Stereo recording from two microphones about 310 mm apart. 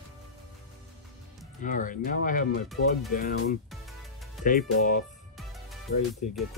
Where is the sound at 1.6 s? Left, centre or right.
Left.